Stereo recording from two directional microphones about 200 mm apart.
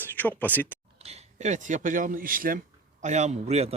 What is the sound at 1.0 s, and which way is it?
A man's voice, 35° right (ahead or behind).